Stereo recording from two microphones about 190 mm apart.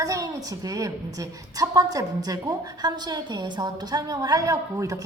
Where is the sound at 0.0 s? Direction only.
15° right (ahead or behind).